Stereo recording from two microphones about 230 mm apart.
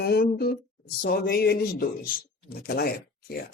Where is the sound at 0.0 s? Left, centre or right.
Left.